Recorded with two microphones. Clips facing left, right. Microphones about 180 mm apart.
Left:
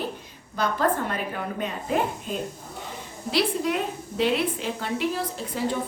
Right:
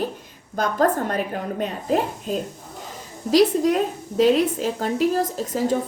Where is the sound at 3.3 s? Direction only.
40° right (ahead or behind).